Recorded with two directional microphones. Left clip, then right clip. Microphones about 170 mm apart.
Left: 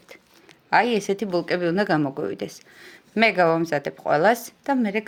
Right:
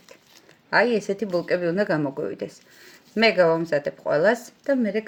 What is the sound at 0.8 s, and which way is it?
Speech, 35° left (ahead or behind).